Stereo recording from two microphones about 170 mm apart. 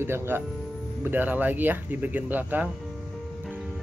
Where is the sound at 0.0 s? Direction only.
15° right (ahead or behind).